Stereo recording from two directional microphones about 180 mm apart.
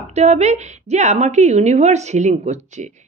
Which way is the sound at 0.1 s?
40° right (ahead or behind).